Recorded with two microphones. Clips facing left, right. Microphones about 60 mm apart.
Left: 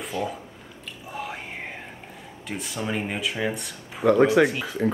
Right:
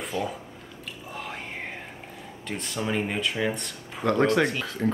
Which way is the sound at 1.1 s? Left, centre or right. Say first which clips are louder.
Left 3 dB; centre.